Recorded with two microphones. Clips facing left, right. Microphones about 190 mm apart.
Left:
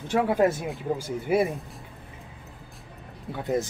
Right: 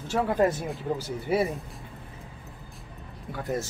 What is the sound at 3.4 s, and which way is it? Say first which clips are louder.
Speech: left 4 dB; 20° left (ahead or behind).